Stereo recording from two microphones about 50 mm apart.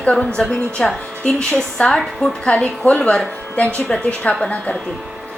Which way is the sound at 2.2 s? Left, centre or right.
Centre.